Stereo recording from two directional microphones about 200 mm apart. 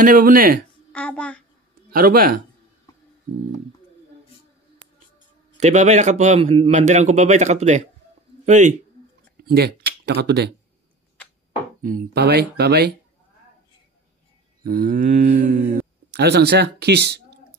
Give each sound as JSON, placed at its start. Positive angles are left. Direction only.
{"t": 0.0, "sound": "speech", "side_deg": -45}
{"t": 0.9, "sound": "a child's voice", "side_deg": 5}
{"t": 1.9, "sound": "speech", "side_deg": -45}
{"t": 3.3, "sound": "a sound", "side_deg": -40}
{"t": 5.6, "sound": "a man's voice", "side_deg": -35}
{"t": 9.4, "sound": "speech", "side_deg": -50}
{"t": 11.8, "sound": "speech", "side_deg": -45}
{"t": 14.6, "sound": "a man's voice", "side_deg": -45}
{"t": 16.1, "sound": "speech", "side_deg": -55}